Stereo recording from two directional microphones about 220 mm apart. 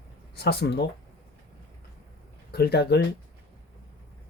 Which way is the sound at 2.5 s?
45° left (ahead or behind).